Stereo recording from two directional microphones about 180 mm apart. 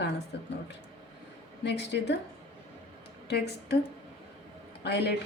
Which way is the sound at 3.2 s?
65° left (ahead or behind).